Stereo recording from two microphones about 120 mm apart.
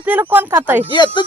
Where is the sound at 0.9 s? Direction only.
40° left (ahead or behind).